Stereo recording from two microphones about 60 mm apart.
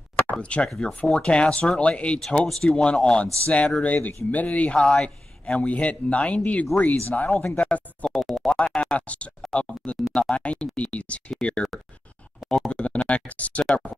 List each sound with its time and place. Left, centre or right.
0.3 s speech: centre
0.8 s speech: centre
2.4 s speech: centre; by 4.7 s left
4.7 s speech: centre
5.0 s speech: centre
7.2 s speech: centre
8.1 s music: centre
8.5 s a sound: centre
8.9 s speech: left
12.4 s a sound: centre
12.8 s speech: left
13.7 s speech: centre